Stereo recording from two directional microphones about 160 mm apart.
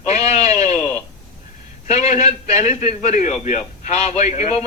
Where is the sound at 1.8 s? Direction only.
45° left (ahead or behind).